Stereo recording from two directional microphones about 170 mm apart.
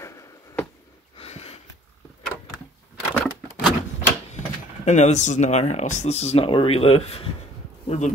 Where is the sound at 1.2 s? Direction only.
35° left (ahead or behind).